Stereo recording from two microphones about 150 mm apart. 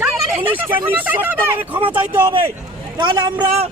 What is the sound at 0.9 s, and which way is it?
Speech, 10° right (ahead or behind).